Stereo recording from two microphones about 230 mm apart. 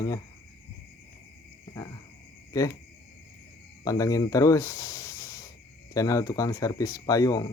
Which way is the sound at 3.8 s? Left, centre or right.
Centre.